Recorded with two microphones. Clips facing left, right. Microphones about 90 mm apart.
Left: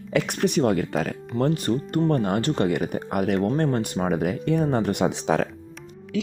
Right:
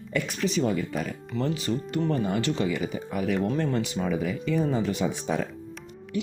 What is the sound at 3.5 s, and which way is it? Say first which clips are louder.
Speech: left 3 dB; 50° left (ahead or behind).